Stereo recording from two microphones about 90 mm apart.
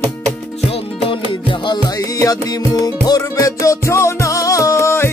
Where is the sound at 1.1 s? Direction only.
70° left (ahead or behind).